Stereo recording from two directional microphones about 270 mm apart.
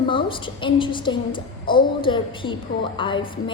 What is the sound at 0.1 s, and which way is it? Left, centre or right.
A woman's voice, centre.